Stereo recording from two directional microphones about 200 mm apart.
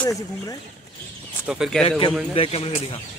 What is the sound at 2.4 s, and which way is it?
Speech, 30° left (ahead or behind).